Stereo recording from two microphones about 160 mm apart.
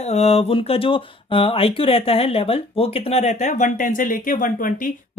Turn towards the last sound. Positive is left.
turn(degrees=60)  # may be behind; listen again after turning